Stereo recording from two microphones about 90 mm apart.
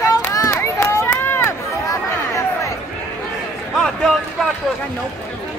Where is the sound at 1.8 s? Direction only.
35° left (ahead or behind).